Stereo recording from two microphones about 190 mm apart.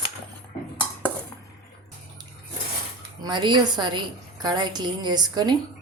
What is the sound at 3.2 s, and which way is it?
A woman's voice, 20° right (ahead or behind).